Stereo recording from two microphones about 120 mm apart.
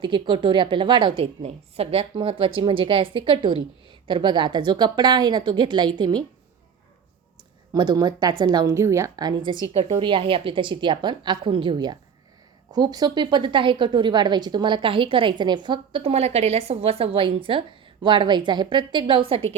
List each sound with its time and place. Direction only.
0.0 s a woman's voice: 40° right (ahead or behind)
1.4 s a woman's voice: 55° right (ahead or behind); by 6.2 s 40° right (ahead or behind)
7.7 s a woman's voice: 35° right (ahead or behind)
9.9 s a woman's voice: 45° right (ahead or behind)